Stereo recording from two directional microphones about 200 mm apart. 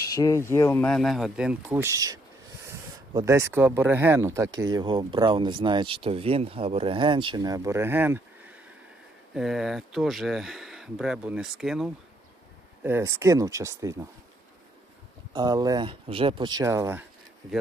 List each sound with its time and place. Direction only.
0.1 s speech: 15° left (ahead or behind); by 2.1 s 15° right (ahead or behind)
3.2 s speech: 15° right (ahead or behind)
12.8 s speech: 15° right (ahead or behind)
15.3 s speech: 20° right (ahead or behind)